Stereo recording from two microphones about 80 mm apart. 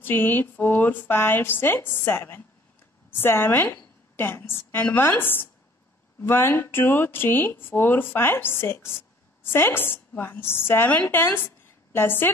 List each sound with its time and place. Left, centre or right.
0.0 s a woman's voice: left